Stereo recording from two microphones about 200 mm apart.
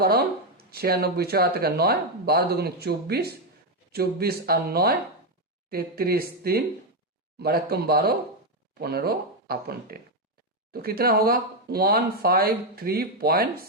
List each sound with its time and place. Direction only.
0.0 s speech: 50° right (ahead or behind)